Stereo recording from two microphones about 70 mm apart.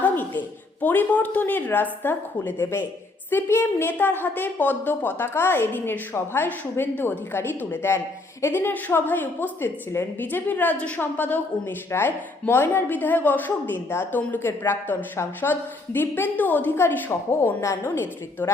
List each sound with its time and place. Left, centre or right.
0.0 s a woman's voice: left